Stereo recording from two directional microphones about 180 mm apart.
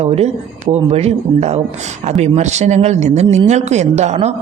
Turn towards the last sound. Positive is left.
turn(degrees=-40)  # may be behind; listen again after turning